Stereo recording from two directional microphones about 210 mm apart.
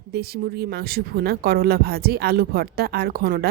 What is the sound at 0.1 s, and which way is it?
Speech, 50° right (ahead or behind).